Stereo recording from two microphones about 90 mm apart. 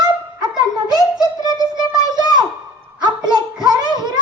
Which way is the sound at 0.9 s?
50° right (ahead or behind).